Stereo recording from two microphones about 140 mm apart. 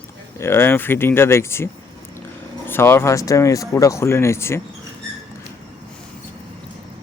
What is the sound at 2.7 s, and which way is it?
Speech, 15° left (ahead or behind).